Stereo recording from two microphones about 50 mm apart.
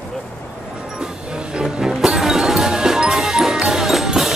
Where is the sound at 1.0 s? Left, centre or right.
Centre.